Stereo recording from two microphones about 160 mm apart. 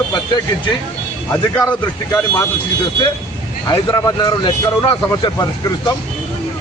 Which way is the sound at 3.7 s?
25° left (ahead or behind).